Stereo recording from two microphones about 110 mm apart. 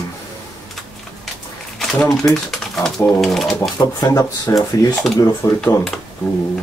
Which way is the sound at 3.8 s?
35° left (ahead or behind).